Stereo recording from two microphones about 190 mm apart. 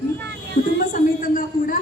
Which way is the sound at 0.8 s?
45° left (ahead or behind).